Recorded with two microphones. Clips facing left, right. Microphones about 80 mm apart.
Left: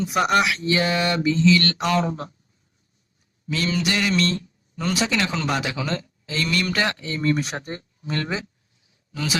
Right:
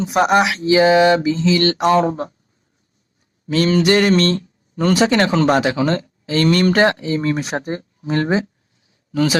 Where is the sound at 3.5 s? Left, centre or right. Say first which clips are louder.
Right 9 dB; right.